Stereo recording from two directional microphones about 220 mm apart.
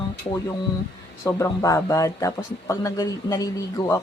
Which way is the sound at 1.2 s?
15° left (ahead or behind).